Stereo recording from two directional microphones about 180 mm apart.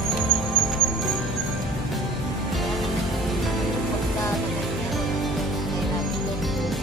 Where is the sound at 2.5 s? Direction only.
Centre (ahead or behind).